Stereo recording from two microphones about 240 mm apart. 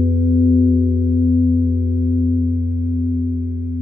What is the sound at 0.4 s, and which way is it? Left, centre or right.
Singing bowl, centre.